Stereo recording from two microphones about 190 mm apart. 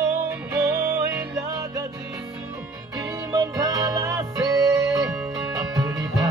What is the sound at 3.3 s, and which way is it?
Music, 15° right (ahead or behind).